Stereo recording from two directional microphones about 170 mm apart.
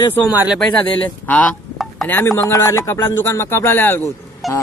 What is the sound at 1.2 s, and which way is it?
Speech, 10° left (ahead or behind).